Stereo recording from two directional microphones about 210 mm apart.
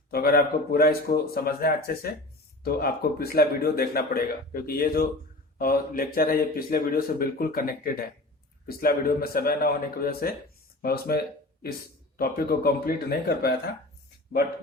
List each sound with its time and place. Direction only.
0.1 s speech: 45° left (ahead or behind)